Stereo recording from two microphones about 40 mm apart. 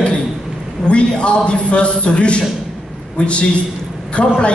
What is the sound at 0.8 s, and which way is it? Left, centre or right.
A man's voice, left.